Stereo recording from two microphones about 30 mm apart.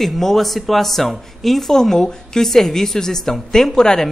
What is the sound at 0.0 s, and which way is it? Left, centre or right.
Speech, centre.